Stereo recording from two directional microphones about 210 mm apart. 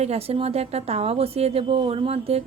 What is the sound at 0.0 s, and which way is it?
A woman's voice, 30° right (ahead or behind).